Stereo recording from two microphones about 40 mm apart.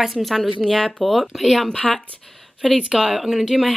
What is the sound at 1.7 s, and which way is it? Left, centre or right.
Speech, left.